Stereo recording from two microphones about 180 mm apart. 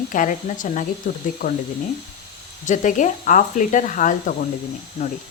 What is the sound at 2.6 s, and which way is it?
Speech, 45° left (ahead or behind).